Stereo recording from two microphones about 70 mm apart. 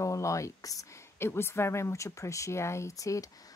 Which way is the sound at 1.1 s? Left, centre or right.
Left.